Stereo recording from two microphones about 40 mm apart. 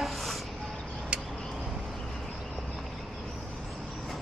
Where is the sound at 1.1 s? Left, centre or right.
Right.